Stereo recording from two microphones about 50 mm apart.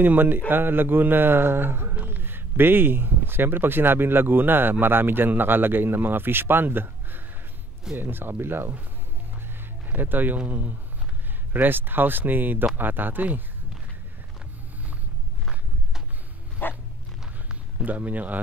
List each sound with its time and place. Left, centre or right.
0.0 s speech: right
9.8 s speech: right
16.6 s dog: left
17.8 s speech: right